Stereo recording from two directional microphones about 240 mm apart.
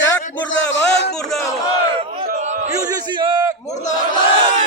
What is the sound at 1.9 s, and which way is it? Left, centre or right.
Speech, right.